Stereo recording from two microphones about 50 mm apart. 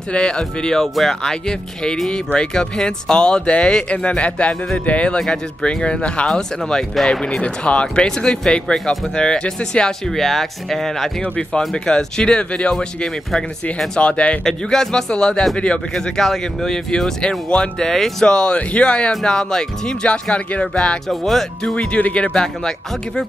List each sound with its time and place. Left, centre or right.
0.1 s speech: centre
14.4 s speech: centre
15.9 s speech: centre
21.1 s speech: centre
21.7 s speech: left
22.3 s speech: centre